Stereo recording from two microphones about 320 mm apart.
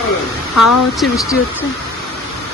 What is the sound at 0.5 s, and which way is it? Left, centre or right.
Speech, left.